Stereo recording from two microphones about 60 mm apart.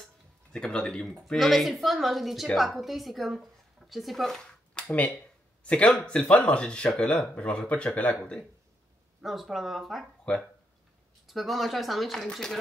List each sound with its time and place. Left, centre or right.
0.5 s a woman's voice: centre
4.9 s speech: left
9.2 s a woman's voice: centre
10.3 s speech: centre
11.2 s a woman's voice: centre